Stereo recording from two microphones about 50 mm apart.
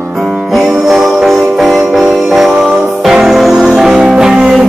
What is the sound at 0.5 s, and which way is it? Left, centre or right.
Music, centre.